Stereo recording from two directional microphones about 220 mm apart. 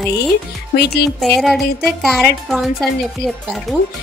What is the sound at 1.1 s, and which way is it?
Music, centre (ahead or behind).